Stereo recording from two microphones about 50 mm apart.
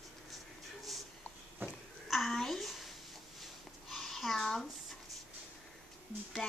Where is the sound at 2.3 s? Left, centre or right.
Centre.